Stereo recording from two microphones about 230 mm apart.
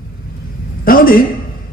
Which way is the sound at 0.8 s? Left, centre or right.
Left.